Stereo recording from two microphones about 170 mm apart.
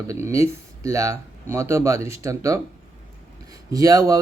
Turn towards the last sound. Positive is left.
turn(degrees=-20)  # may be behind; listen again after turning